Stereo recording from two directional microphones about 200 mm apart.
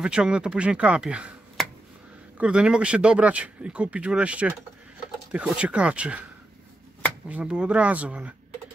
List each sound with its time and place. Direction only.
0.0 s speech: 5° right (ahead or behind)
7.2 s speech: 5° right (ahead or behind)